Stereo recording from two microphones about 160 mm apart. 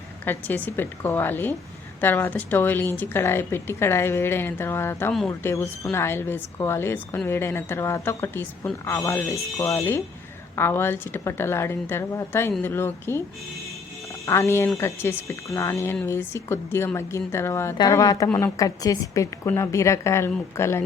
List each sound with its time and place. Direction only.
0.3 s a woman's voice: 10° left (ahead or behind)
14.3 s a woman's voice: 15° left (ahead or behind)